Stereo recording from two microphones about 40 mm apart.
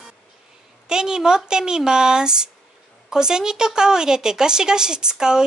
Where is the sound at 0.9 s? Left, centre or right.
Centre.